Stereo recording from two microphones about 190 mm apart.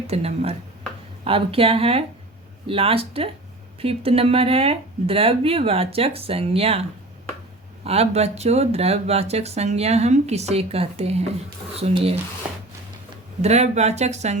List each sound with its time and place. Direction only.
0.1 s speech: 35° right (ahead or behind)
7.9 s speech: 35° right (ahead or behind)
13.4 s speech: 35° right (ahead or behind)